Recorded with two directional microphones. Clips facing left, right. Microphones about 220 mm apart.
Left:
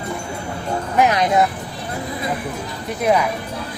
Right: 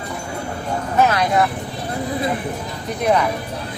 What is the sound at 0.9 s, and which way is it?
Speech, 15° left (ahead or behind).